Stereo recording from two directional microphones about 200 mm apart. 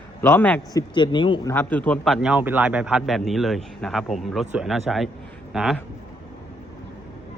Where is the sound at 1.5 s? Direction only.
10° left (ahead or behind).